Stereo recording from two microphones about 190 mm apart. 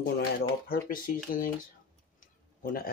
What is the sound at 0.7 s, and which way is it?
Speech, 45° left (ahead or behind).